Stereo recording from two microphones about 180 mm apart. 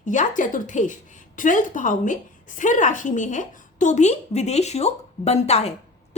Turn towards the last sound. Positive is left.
turn(degrees=35)  # may be behind; listen again after turning